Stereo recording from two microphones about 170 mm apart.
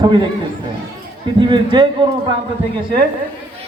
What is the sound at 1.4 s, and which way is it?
Speech, 30° right (ahead or behind).